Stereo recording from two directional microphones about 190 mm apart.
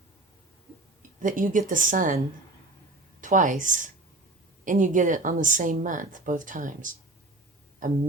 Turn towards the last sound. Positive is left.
turn(degrees=-45)  # may be behind; listen again after turning